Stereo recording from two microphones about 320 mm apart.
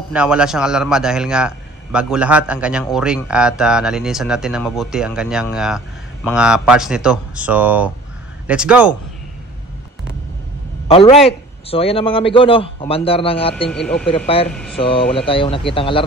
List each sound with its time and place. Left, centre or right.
0.1 s a man's voice: centre
10.9 s a man's voice: centre
14.5 s a man's voice: centre
15.2 s a man's voice: centre